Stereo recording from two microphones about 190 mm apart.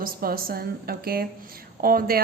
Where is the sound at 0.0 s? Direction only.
50° right (ahead or behind).